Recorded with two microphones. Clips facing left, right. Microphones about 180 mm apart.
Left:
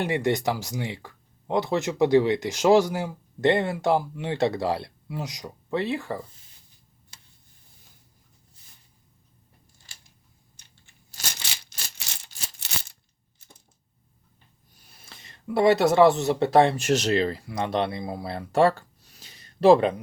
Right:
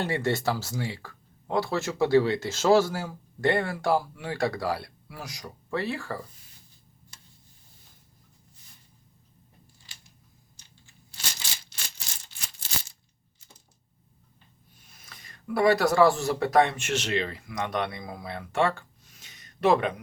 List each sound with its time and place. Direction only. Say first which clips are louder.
0.0 s speech: left 3 dB; 15° left (ahead or behind)
10.6 s a sound: right 4 dB; 60° left (ahead or behind)
14.8 s speech: left 2 dB; 35° left (ahead or behind)